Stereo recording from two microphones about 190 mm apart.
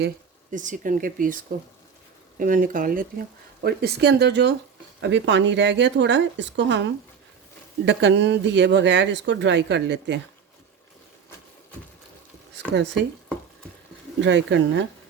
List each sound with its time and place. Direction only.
0.5 s speech: 40° right (ahead or behind); by 10.2 s 65° right (ahead or behind)
12.5 s speech: 65° right (ahead or behind)
14.2 s speech: 70° right (ahead or behind)